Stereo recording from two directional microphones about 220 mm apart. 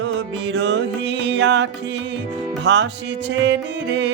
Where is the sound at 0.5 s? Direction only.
55° right (ahead or behind).